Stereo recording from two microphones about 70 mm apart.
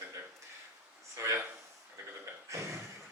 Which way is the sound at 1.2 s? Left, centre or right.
Right.